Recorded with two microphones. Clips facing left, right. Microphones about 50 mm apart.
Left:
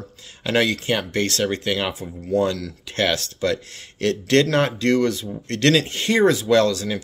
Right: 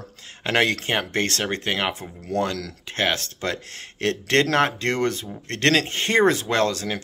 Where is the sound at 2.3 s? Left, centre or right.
Right.